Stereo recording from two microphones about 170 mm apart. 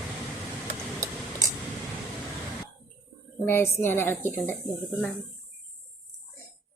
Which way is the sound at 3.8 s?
15° left (ahead or behind).